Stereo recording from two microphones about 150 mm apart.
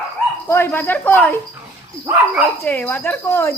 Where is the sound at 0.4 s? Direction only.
15° left (ahead or behind).